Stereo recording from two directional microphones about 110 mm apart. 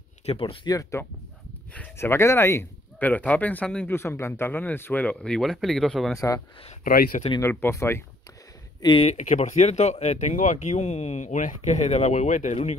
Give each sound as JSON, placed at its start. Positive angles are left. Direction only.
{"t": 0.2, "sound": "speech", "side_deg": 65}
{"t": 0.7, "sound": "speech", "side_deg": 30}
{"t": 6.1, "sound": "speech", "side_deg": 30}
{"t": 9.0, "sound": "speech", "side_deg": 85}